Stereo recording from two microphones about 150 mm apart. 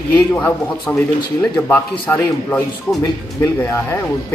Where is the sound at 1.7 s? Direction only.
10° left (ahead or behind).